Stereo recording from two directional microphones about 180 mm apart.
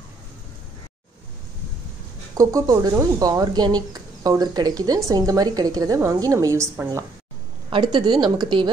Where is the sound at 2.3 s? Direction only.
20° right (ahead or behind).